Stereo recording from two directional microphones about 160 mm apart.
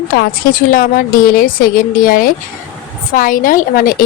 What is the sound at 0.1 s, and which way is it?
A woman's voice, 65° left (ahead or behind).